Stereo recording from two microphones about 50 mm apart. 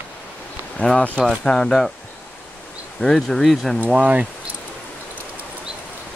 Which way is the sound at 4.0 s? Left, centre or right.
Right.